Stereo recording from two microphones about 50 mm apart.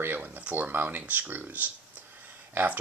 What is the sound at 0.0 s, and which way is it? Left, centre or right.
Speech, right.